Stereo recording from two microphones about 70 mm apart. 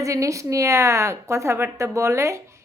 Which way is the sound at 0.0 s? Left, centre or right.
Right.